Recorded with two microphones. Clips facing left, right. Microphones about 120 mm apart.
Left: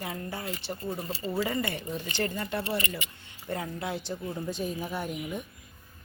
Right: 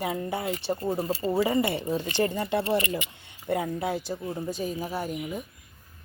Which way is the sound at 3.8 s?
45° right (ahead or behind).